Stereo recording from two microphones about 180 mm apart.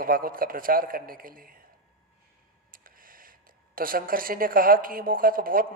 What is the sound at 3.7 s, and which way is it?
Speech, 50° right (ahead or behind).